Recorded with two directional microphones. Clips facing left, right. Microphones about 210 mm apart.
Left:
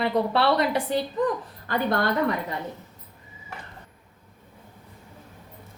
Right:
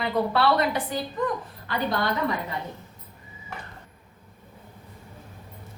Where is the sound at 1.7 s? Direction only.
45° left (ahead or behind).